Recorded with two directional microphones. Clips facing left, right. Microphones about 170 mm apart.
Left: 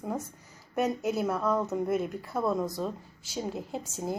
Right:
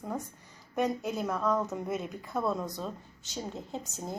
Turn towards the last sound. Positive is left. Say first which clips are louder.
# left 4 dB
turn(degrees=10)  # may be behind; listen again after turning